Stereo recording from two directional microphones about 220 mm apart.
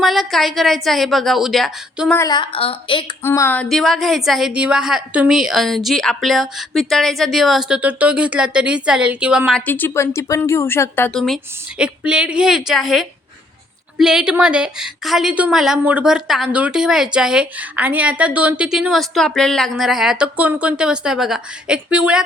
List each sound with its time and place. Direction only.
0.0 s a woman's voice: centre (ahead or behind)
2.1 s a woman's voice: 20° left (ahead or behind)
3.2 s a woman's voice: 10° left (ahead or behind); by 22.2 s 5° right (ahead or behind)